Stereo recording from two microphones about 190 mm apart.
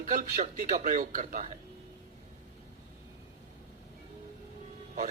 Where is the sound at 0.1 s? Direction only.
45° right (ahead or behind).